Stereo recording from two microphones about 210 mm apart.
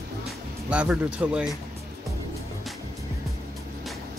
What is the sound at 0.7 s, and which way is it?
Speech, 5° right (ahead or behind).